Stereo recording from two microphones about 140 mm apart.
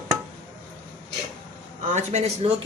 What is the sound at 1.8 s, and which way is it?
Speech, 60° right (ahead or behind).